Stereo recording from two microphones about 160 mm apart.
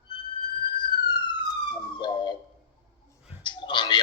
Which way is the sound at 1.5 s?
30° left (ahead or behind).